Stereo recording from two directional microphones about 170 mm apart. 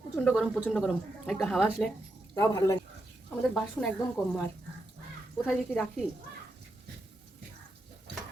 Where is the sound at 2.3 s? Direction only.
20° left (ahead or behind).